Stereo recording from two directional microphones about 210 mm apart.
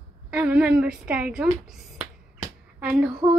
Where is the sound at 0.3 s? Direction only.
5° right (ahead or behind).